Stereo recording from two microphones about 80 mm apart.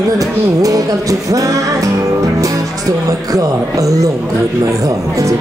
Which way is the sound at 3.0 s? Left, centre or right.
Right.